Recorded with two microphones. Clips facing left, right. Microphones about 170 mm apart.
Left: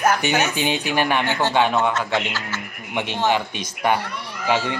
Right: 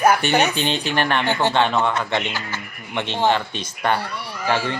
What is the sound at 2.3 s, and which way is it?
Speech, 15° right (ahead or behind).